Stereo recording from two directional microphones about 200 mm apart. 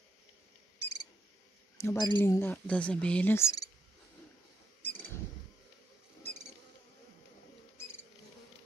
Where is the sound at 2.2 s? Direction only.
10° left (ahead or behind).